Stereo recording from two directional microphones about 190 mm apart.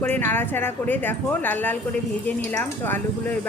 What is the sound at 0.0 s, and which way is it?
A woman's voice, 10° left (ahead or behind).